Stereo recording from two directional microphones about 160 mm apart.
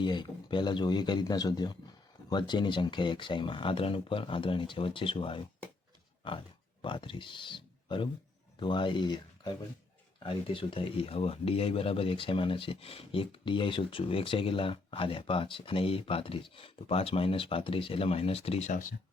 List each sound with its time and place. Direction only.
0.0 s a man's voice: 30° left (ahead or behind)
6.2 s pig: 30° left (ahead or behind)
6.8 s speech: 30° left (ahead or behind); by 18.9 s 55° left (ahead or behind)